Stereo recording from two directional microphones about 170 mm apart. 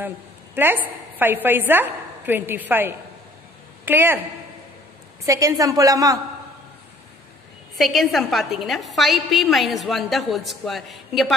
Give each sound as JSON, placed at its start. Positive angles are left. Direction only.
{"t": 0.6, "sound": "a woman's voice", "side_deg": -10}
{"t": 5.2, "sound": "a woman's voice", "side_deg": -20}
{"t": 7.7, "sound": "a woman's voice", "side_deg": 0}